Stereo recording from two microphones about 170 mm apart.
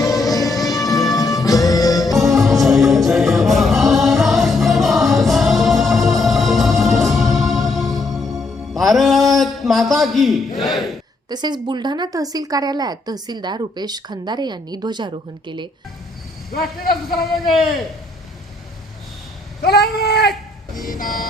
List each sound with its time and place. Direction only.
0.1 s music: centre (ahead or behind)
1.1 s music: 20° left (ahead or behind)
2.1 s music: centre (ahead or behind)
8.8 s a sound: centre (ahead or behind)
11.3 s a woman's voice: 25° right (ahead or behind)
16.5 s vehicle: 60° left (ahead or behind)
17.2 s a man's voice: centre (ahead or behind)
19.6 s speech: 75° left (ahead or behind)
20.7 s vehicle: 55° left (ahead or behind)